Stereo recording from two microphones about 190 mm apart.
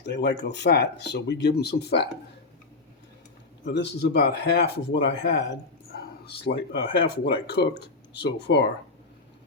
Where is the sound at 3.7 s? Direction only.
60° left (ahead or behind).